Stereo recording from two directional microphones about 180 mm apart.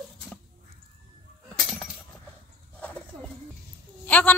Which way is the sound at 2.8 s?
5° left (ahead or behind).